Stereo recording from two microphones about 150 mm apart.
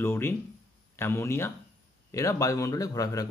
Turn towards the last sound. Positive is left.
turn(degrees=20)  # may be behind; listen again after turning